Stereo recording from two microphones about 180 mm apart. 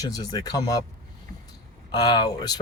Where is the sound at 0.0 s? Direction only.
20° left (ahead or behind).